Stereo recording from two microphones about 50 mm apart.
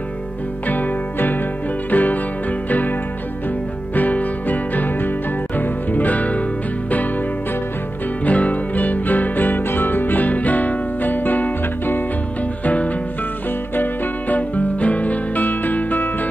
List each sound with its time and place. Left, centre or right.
0.7 s music: left
3.9 s music: left
8.3 s music: left
14.3 s music: left